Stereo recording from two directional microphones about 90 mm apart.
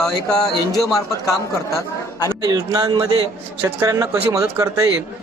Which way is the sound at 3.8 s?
35° right (ahead or behind).